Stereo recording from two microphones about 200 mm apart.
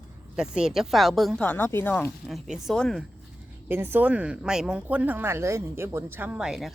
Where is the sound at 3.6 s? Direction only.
10° right (ahead or behind).